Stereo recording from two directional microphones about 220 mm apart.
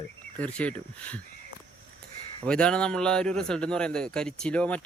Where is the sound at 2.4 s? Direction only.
5° left (ahead or behind).